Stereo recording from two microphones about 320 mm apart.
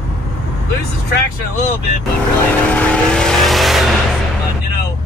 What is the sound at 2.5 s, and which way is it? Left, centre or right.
Vehicle, centre.